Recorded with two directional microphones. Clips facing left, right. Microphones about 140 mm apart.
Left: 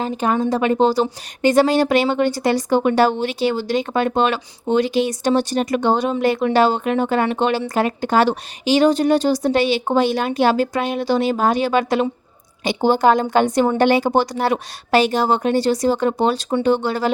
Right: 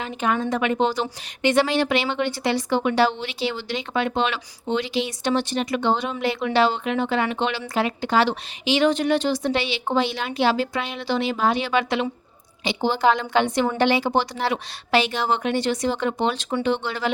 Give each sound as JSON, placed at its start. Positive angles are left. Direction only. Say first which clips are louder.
{"t": 0.0, "sound": "a woman's voice", "louder": "left 5 dB", "side_deg": 35}